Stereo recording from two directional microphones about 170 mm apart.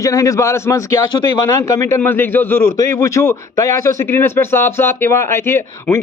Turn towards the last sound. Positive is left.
turn(degrees=15)  # may be behind; listen again after turning